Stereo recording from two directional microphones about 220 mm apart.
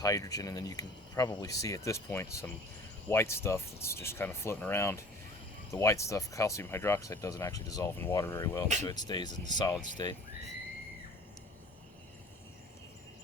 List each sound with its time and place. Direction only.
0.0 s speech: 15° left (ahead or behind)
8.6 s speech: 35° right (ahead or behind)
8.9 s speech: 20° left (ahead or behind)